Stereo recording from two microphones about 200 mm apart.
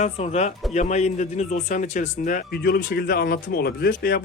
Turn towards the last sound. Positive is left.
turn(degrees=50)  # may be behind; listen again after turning